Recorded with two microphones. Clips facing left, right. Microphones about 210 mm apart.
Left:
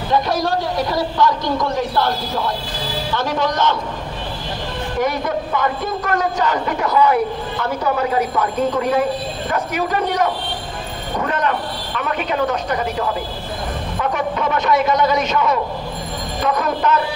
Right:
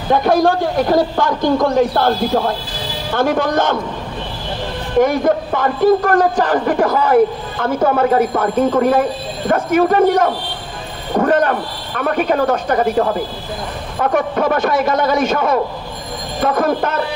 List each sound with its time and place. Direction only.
0.1 s a man's voice: 50° right (ahead or behind)
5.0 s a man's voice: 50° right (ahead or behind)